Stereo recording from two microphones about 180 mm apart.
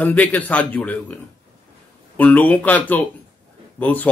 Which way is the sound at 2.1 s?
10° left (ahead or behind).